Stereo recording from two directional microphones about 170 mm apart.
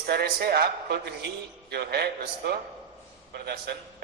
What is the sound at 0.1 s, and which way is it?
A man's voice, 65° right (ahead or behind).